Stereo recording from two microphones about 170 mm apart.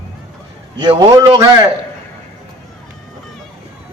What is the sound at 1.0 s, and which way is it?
Speech, 20° right (ahead or behind).